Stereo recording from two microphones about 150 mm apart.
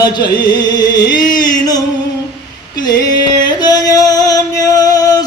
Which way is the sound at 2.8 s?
25° left (ahead or behind).